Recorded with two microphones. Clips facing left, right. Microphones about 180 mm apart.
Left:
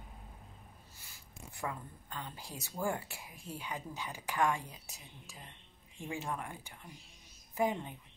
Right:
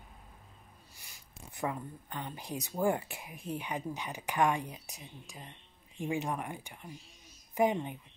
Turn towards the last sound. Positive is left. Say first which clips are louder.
# right 4 dB
turn(degrees=-20)  # may be behind; listen again after turning